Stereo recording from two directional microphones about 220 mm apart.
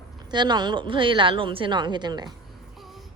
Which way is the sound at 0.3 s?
20° right (ahead or behind).